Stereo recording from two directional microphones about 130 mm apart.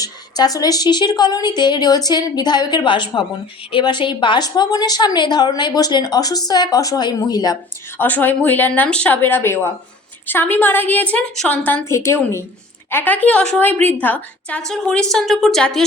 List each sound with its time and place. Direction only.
0.0 s a woman's voice: 30° left (ahead or behind)
7.9 s a woman's voice: 15° left (ahead or behind)